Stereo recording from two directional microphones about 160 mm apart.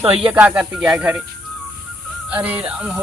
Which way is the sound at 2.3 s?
10° right (ahead or behind).